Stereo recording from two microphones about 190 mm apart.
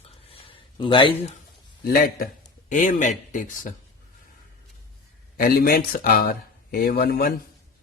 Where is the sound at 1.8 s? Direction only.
50° left (ahead or behind).